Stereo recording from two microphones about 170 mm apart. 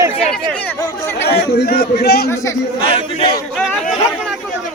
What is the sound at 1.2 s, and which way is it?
A man's voice, 75° left (ahead or behind).